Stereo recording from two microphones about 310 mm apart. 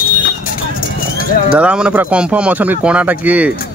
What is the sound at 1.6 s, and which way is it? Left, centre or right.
Speech, centre.